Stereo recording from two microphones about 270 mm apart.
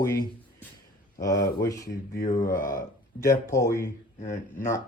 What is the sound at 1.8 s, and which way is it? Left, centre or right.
Speech, left.